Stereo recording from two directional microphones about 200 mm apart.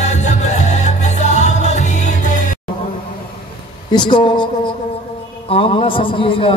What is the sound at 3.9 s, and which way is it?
A man's voice, 25° left (ahead or behind).